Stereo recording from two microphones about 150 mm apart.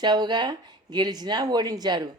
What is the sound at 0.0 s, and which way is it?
A woman's voice, 30° right (ahead or behind).